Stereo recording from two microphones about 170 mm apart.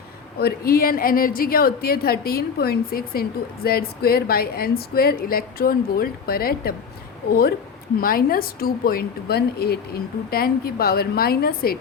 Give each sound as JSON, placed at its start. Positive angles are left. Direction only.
{"t": 0.3, "sound": "a woman's voice", "side_deg": 65}
{"t": 8.0, "sound": "a woman's voice", "side_deg": 60}